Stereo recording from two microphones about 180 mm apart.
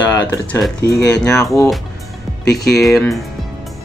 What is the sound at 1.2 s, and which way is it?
Speech, 5° left (ahead or behind).